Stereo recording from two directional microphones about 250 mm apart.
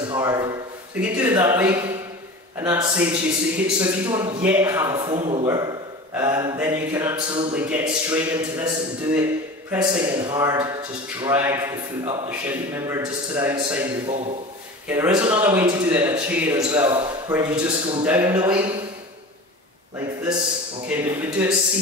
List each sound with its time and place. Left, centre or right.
0.1 s a man's voice: centre
17.3 s a man's voice: centre
20.9 s a man's voice: centre